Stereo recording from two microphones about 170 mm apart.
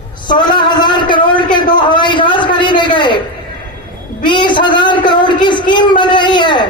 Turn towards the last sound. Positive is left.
turn(degrees=25)  # may be behind; listen again after turning